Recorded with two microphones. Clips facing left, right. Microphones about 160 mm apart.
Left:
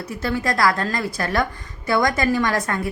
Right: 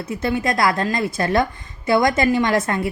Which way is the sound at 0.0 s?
20° right (ahead or behind).